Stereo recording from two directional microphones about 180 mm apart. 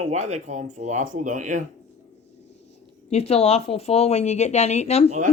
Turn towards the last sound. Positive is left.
turn(degrees=35)  # may be behind; listen again after turning